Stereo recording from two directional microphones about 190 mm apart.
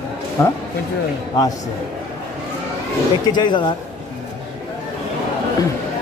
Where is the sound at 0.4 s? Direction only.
15° left (ahead or behind).